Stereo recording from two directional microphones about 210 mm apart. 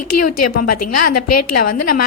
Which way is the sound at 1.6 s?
45° left (ahead or behind).